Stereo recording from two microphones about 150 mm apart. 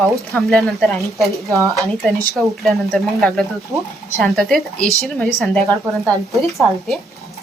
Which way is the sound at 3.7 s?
20° right (ahead or behind).